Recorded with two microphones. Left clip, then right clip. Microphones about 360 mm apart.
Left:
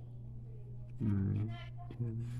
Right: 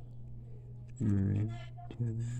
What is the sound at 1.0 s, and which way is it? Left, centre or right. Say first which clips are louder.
Music: right 4 dB; centre.